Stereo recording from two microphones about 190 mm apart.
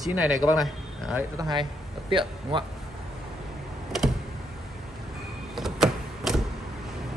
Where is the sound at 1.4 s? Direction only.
25° right (ahead or behind).